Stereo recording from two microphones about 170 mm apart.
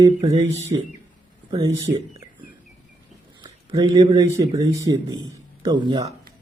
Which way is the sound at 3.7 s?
25° right (ahead or behind).